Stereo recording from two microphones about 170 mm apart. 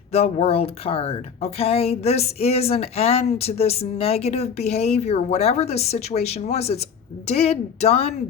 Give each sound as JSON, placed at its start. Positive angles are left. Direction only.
{"t": 0.1, "sound": "a woman's voice", "side_deg": 35}